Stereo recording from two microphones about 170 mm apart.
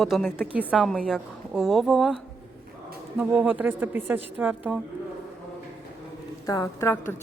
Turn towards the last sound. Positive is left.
turn(degrees=15)  # may be behind; listen again after turning